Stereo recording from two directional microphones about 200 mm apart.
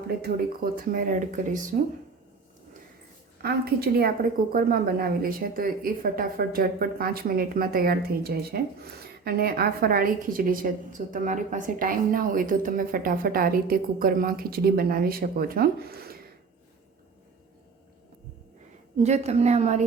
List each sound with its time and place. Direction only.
0.2 s a woman's voice: 45° right (ahead or behind)
3.4 s a woman's voice: 50° right (ahead or behind)
18.9 s a woman's voice: 35° right (ahead or behind)